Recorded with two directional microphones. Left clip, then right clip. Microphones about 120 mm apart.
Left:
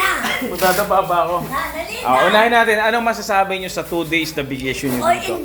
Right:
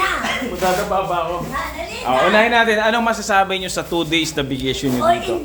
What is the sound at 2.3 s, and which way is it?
Speech, centre (ahead or behind).